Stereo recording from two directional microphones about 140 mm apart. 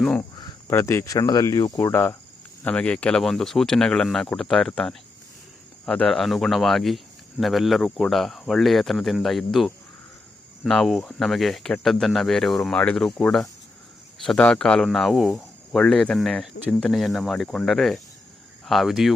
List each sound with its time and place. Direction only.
0.0 s speech: 10° left (ahead or behind)